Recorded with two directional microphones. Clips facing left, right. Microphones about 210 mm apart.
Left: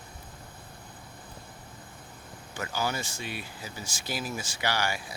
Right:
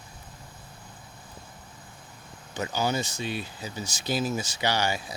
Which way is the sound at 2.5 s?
20° right (ahead or behind).